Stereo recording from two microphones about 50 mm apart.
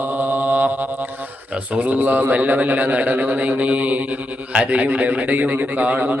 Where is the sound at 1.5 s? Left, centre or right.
Right.